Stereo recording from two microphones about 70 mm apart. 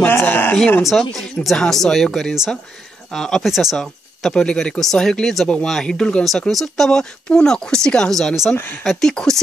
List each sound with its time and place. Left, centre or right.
0.2 s speech: left
0.8 s speech: centre
8.5 s speech: left
8.8 s speech: centre